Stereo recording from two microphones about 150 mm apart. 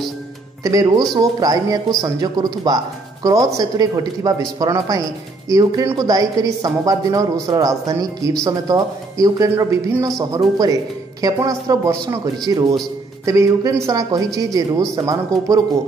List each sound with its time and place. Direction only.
1.1 s a man's voice: 25° right (ahead or behind)